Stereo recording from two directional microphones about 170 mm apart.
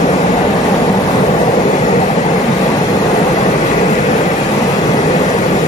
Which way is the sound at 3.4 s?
45° left (ahead or behind).